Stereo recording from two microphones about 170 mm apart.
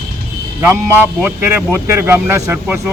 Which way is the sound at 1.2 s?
10° right (ahead or behind).